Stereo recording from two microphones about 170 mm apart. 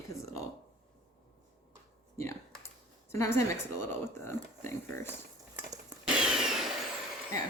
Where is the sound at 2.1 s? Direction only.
15° left (ahead or behind).